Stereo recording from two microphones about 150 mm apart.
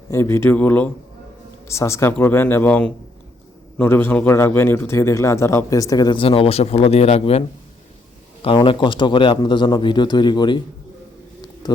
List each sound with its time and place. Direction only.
0.1 s a man's voice: 15° left (ahead or behind)